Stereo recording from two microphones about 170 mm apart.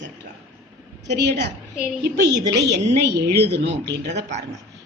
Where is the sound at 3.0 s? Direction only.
80° right.